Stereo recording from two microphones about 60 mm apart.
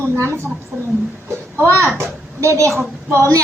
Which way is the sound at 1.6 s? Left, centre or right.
Right.